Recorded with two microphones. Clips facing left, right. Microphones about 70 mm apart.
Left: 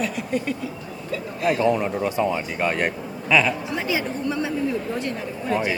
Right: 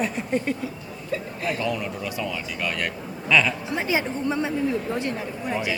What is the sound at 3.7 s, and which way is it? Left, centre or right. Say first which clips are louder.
A woman's voice: even; right.